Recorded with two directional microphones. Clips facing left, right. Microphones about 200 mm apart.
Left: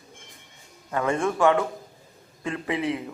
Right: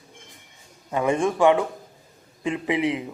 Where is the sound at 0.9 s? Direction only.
15° right (ahead or behind).